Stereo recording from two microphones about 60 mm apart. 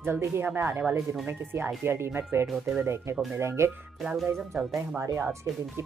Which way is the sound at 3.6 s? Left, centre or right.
Right.